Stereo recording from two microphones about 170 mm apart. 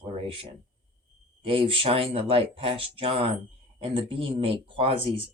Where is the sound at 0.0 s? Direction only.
35° right (ahead or behind).